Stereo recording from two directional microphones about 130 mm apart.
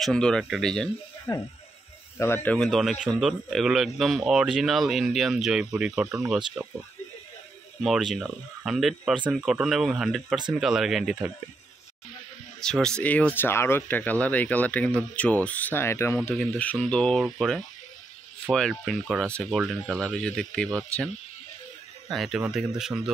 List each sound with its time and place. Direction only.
0.0 s speech: 5° left (ahead or behind)
1.3 s speech: 30° left (ahead or behind)
2.6 s speech: centre (ahead or behind)
7.8 s speech: 5° right (ahead or behind)
12.5 s speech: 5° left (ahead or behind)
22.1 s speech: centre (ahead or behind)